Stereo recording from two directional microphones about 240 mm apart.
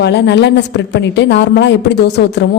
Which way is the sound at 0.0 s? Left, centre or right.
Left.